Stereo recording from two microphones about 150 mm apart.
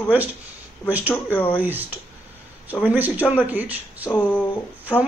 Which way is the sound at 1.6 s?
10° right (ahead or behind).